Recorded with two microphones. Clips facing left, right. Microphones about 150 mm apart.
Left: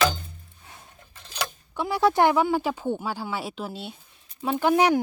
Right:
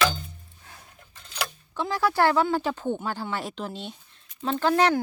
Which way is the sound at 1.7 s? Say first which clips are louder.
Left 3 dB; 10° left (ahead or behind).